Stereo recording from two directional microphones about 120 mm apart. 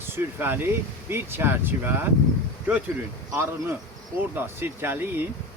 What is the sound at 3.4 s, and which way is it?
Speech, 20° right (ahead or behind).